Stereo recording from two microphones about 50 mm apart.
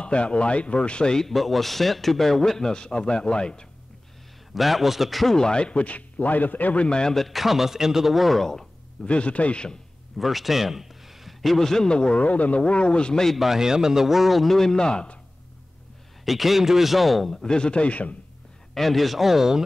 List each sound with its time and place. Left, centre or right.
0.0 s a man's voice: left
1.2 s a man's voice: centre
4.6 s a man's voice: centre
5.4 s a man's voice: centre
7.2 s a man's voice: centre
9.0 s a man's voice: left
10.1 s a man's voice: centre
13.4 s a man's voice: centre
16.3 s a man's voice: centre; by 18.1 s left
18.8 s a man's voice: centre